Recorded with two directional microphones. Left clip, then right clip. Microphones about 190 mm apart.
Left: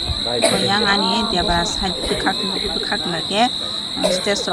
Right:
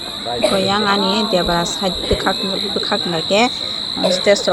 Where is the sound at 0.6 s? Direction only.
Centre (ahead or behind).